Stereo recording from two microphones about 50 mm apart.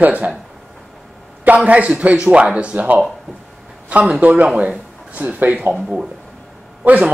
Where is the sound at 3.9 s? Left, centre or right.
Right.